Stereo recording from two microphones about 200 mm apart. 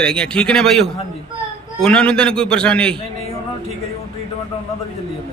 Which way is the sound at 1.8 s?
5° left (ahead or behind).